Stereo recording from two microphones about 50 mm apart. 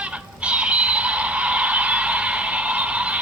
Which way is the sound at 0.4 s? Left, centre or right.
Right.